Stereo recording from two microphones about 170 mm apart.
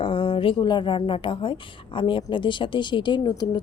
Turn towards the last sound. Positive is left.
turn(degrees=25)  # may be behind; listen again after turning